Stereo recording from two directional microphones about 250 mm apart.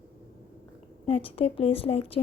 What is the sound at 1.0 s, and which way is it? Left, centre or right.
Speech, left.